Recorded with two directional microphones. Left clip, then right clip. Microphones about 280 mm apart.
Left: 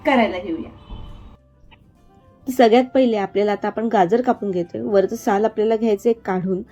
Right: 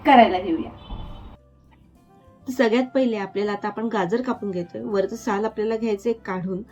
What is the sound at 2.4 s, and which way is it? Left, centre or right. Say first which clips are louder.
A woman's voice: left 7 dB; centre.